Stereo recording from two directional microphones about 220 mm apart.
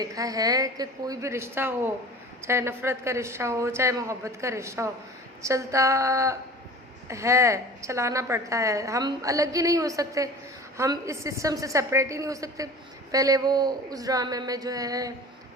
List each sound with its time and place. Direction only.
0.0 s a woman's voice: 15° right (ahead or behind)